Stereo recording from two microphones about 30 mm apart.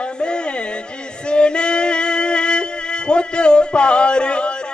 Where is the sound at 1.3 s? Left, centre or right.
Left.